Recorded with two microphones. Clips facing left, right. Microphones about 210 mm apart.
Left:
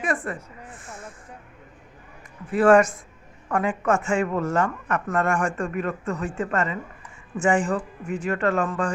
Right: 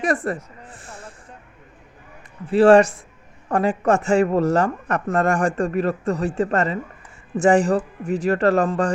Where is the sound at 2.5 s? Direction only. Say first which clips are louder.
Right 4 dB; 30° right (ahead or behind).